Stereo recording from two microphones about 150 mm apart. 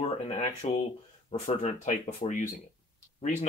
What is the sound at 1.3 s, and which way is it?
Speech, 50° left (ahead or behind).